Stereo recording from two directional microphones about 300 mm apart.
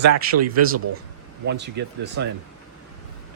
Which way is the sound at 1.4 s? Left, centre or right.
Right.